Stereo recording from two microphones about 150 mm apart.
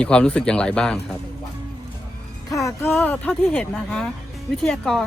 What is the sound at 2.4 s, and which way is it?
Speech, 20° left (ahead or behind).